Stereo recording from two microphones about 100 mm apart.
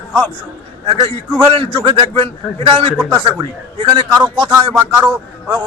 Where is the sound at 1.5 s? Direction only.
60° right (ahead or behind).